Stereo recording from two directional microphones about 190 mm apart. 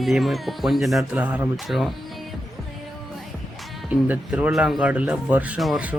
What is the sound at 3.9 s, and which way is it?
Speech, 10° right (ahead or behind).